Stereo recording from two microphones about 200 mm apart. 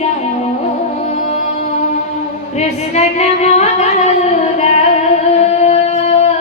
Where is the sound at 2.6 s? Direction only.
35° left (ahead or behind).